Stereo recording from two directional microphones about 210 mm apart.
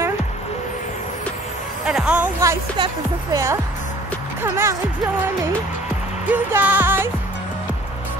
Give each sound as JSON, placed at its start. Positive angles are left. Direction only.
{"t": 1.9, "sound": "a sound", "side_deg": -5}
{"t": 2.8, "sound": "speech", "side_deg": -15}
{"t": 6.2, "sound": "music", "side_deg": -10}